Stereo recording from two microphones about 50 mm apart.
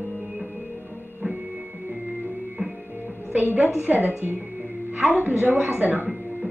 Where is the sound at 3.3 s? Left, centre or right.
Right.